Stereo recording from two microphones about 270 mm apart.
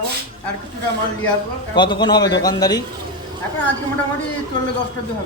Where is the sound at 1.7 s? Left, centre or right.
Centre.